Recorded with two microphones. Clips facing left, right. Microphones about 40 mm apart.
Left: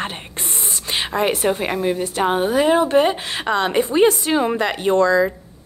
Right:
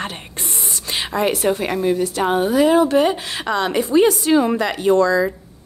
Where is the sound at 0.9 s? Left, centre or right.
Left.